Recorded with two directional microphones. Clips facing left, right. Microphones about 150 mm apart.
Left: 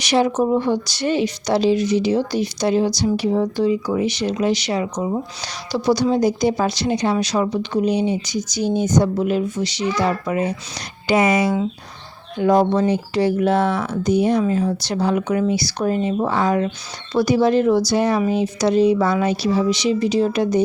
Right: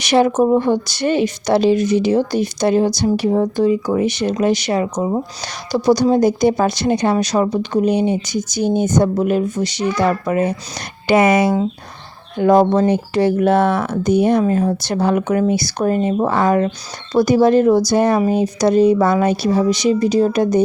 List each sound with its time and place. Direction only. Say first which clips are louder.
0.0 s speech: right 4 dB; 55° right (ahead or behind)